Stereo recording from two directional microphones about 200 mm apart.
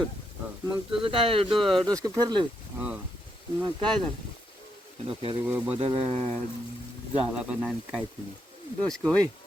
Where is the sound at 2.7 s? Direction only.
5° right (ahead or behind).